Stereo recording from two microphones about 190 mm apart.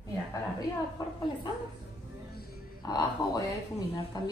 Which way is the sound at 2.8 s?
20° left (ahead or behind).